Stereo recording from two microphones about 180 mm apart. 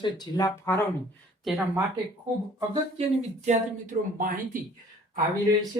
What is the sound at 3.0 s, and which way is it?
Speech, 40° right (ahead or behind).